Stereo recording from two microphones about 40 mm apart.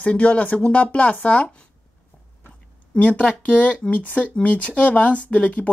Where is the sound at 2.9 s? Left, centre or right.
Left.